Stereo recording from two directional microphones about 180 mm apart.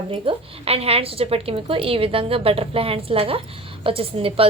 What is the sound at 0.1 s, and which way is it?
A woman's voice, 30° right (ahead or behind).